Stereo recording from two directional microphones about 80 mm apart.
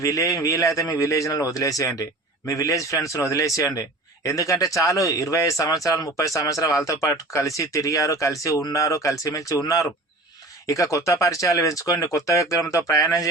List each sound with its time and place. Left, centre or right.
0.0 s a man's voice: left